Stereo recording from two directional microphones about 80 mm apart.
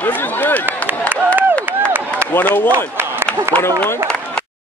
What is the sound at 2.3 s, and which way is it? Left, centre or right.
Speech, left.